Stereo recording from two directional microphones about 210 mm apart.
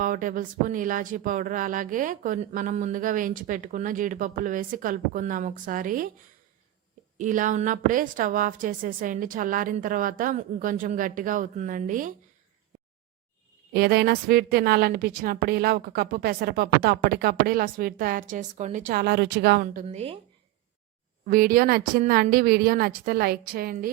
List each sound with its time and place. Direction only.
0.0 s speech: 40° right (ahead or behind)
7.2 s speech: 40° right (ahead or behind)
13.7 s a woman's voice: 50° right (ahead or behind); by 20.1 s 30° right (ahead or behind)
21.2 s a woman's voice: 45° right (ahead or behind)